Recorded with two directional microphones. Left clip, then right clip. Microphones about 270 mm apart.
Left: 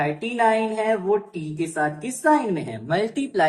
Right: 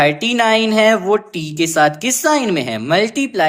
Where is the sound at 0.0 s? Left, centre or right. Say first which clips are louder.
Right 7 dB; right.